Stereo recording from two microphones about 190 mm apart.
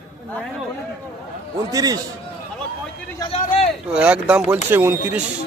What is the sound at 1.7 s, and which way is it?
Speech, 20° right (ahead or behind).